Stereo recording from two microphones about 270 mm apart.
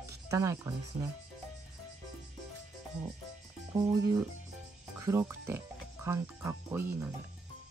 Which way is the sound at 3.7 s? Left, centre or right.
Centre.